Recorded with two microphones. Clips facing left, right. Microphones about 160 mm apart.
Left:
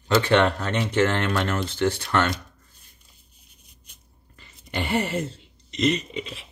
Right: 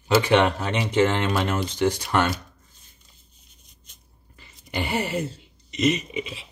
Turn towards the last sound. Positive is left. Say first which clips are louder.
# right 2 dB
turn(degrees=-15)  # may be behind; listen again after turning